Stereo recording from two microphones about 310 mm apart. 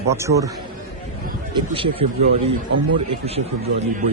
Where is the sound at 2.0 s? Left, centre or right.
Right.